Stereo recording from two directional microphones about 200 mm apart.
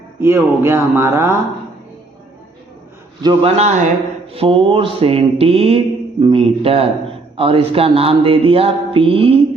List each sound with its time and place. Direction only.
0.2 s speech: 10° right (ahead or behind)
3.2 s a man's voice: 30° right (ahead or behind)
4.3 s music: 25° right (ahead or behind)